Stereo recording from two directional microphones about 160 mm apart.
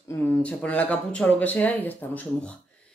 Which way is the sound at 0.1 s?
10° left (ahead or behind).